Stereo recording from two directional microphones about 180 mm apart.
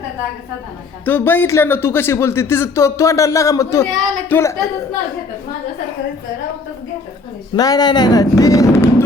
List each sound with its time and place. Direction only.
1.0 s speech: 10° left (ahead or behind)
7.5 s speech: 20° left (ahead or behind)